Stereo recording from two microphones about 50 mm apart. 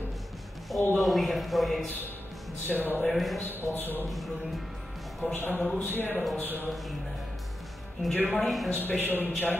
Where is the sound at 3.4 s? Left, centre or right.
Left.